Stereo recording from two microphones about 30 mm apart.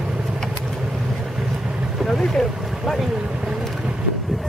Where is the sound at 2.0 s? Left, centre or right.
Centre.